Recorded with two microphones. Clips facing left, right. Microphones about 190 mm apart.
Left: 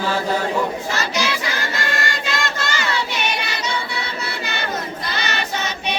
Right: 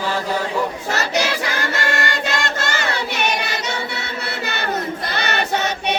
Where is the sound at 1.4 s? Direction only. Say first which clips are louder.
Right 2 dB; 65° right (ahead or behind).